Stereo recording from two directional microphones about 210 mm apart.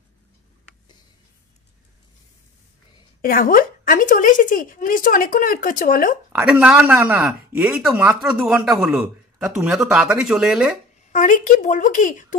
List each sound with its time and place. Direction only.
3.2 s a woman's voice: 45° left (ahead or behind)
6.3 s speech: 5° right (ahead or behind)
11.1 s a woman's voice: 40° left (ahead or behind)